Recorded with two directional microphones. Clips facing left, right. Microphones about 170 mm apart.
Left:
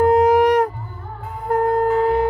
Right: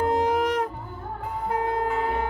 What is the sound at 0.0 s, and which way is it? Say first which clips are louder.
Music: left 9 dB; 60° left (ahead or behind).